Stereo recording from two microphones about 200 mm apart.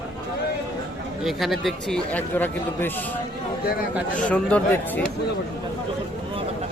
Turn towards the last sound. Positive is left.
turn(degrees=5)  # may be behind; listen again after turning